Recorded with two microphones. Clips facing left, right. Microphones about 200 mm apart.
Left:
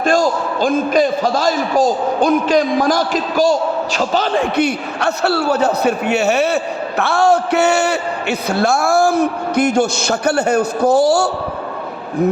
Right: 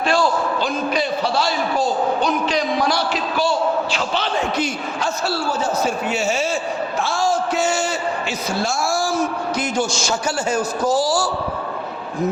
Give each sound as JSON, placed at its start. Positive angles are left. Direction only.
{"t": 0.0, "sound": "a man's voice", "side_deg": 45}
{"t": 4.5, "sound": "a man's voice", "side_deg": 65}